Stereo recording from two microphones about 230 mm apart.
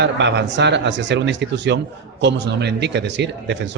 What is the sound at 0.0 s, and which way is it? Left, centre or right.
A man's voice, right.